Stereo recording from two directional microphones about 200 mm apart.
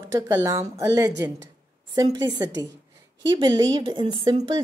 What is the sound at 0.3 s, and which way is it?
Speech, 20° right (ahead or behind).